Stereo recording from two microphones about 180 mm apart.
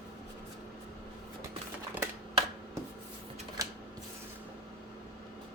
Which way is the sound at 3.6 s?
20° right (ahead or behind).